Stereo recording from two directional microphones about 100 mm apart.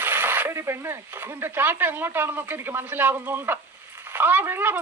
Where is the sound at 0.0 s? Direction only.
20° right (ahead or behind).